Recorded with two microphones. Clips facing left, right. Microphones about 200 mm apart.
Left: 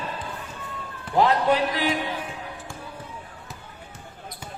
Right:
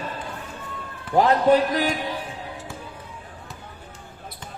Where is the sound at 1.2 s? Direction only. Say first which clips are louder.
Right 3 dB; 45° right (ahead or behind).